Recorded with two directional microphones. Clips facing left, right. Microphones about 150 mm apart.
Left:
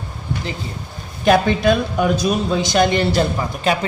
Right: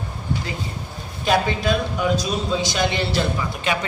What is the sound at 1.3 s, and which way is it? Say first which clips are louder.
A woman's voice: left 6 dB; 55° left (ahead or behind).